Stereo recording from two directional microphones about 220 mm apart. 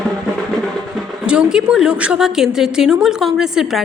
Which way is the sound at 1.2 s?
5° right (ahead or behind).